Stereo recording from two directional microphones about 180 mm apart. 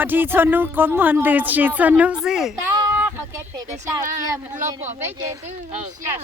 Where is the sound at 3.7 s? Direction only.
45° right (ahead or behind).